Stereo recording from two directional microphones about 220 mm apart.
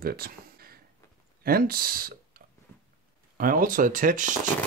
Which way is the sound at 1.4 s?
40° right (ahead or behind).